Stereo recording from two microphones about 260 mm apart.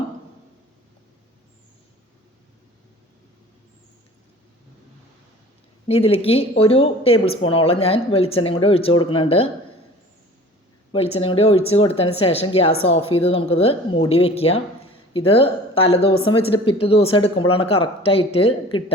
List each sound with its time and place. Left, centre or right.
5.9 s speech: left
10.9 s speech: left